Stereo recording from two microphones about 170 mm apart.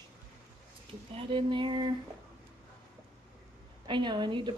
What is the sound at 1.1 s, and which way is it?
Speech, 30° right (ahead or behind).